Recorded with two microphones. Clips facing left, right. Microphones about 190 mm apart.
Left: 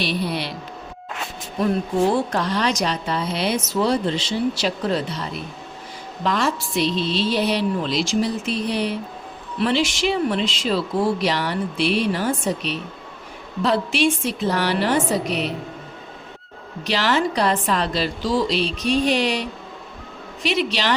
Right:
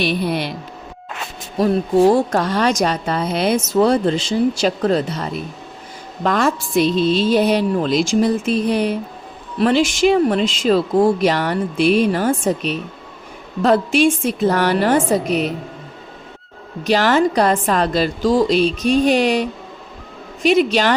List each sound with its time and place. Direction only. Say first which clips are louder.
0.0 s speech: right 5 dB; 50° right (ahead or behind)
1.5 s speech: right 6 dB; 40° right (ahead or behind)
16.8 s speech: right 6 dB; 50° right (ahead or behind)